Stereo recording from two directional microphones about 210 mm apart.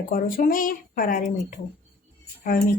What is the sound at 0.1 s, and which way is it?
A woman's voice, 45° left (ahead or behind).